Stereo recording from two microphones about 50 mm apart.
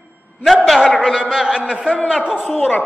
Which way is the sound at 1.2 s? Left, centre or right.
Centre.